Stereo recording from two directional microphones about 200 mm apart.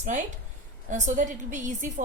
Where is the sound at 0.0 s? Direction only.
35° right (ahead or behind).